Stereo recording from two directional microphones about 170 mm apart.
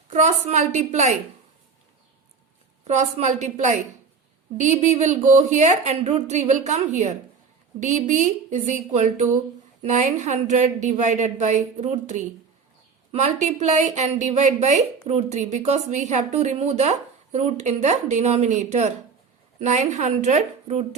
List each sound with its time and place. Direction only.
0.1 s a woman's voice: 45° right (ahead or behind)
2.8 s a woman's voice: 40° right (ahead or behind)